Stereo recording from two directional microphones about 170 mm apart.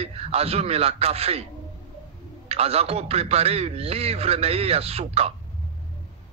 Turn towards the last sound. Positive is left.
turn(degrees=-35)  # may be behind; listen again after turning